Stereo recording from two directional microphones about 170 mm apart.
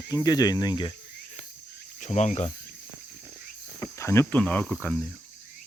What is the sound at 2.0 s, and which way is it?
Speech, 45° left (ahead or behind).